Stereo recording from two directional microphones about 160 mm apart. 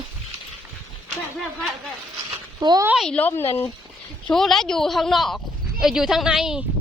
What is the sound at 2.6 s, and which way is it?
Speech, 25° right (ahead or behind).